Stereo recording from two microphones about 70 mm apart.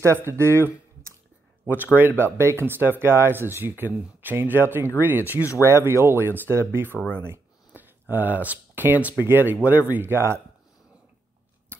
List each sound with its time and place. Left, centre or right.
0.0 s speech: right
5.4 s speech: left
5.7 s speech: right
7.1 s a sound: right
9.2 s speech: right